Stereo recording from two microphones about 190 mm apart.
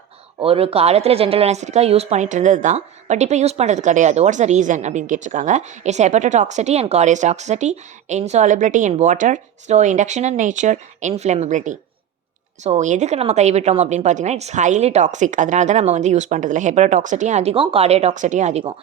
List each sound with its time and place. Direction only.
0.3 s speech: 30° right (ahead or behind)